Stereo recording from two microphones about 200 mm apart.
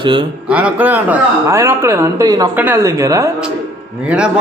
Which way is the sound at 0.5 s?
10° right (ahead or behind).